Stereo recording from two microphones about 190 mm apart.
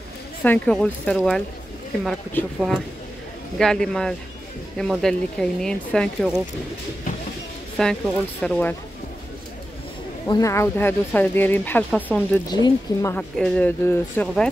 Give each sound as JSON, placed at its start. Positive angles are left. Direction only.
{"t": 0.4, "sound": "speech", "side_deg": 5}
{"t": 7.7, "sound": "speech", "side_deg": 5}
{"t": 10.2, "sound": "speech", "side_deg": 20}
{"t": 12.4, "sound": "speech", "side_deg": 20}
{"t": 13.1, "sound": "speech", "side_deg": 10}